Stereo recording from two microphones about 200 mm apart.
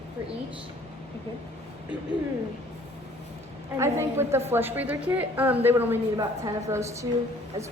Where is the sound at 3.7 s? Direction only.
15° right (ahead or behind).